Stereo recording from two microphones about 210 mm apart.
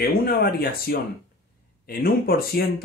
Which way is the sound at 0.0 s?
45° left (ahead or behind).